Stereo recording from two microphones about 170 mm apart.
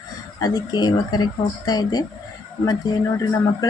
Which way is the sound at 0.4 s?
25° left (ahead or behind).